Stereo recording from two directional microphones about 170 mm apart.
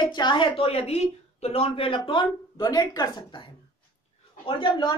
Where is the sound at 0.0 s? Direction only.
25° left (ahead or behind).